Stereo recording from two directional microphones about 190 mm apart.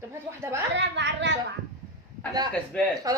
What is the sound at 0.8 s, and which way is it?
Speech, 70° right (ahead or behind).